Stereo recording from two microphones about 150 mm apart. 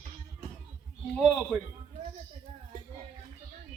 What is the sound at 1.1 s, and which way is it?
Speech, 5° left (ahead or behind).